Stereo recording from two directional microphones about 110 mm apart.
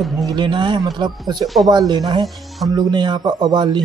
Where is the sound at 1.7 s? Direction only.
40° right (ahead or behind).